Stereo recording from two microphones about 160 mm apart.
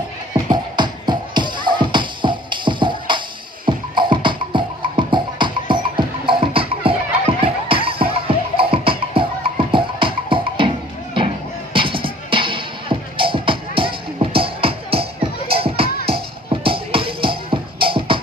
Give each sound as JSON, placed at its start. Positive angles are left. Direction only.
{"t": 0.5, "sound": "music", "side_deg": -30}
{"t": 11.7, "sound": "music", "side_deg": -35}